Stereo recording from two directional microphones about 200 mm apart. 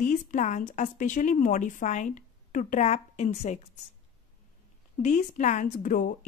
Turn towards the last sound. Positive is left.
turn(degrees=40)  # may be behind; listen again after turning